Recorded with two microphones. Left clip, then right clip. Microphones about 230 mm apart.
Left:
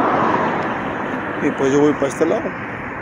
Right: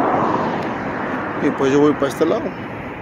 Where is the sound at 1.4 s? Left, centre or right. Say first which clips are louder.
Even; centre.